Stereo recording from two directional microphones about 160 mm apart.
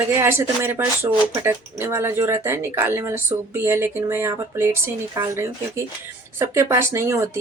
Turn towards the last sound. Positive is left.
turn(degrees=-15)  # may be behind; listen again after turning